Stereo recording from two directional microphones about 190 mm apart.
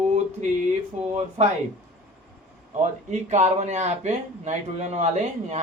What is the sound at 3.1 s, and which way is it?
Speech, 35° right (ahead or behind).